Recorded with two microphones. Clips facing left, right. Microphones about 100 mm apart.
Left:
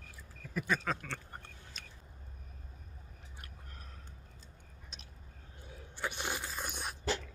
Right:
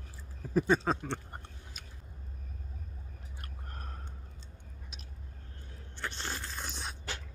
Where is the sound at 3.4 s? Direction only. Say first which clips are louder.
Right 11 dB; 50° right (ahead or behind).